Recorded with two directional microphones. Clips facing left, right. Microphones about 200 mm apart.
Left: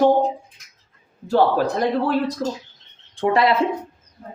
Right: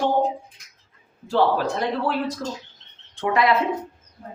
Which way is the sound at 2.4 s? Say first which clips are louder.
Left 5 dB; 30° left (ahead or behind).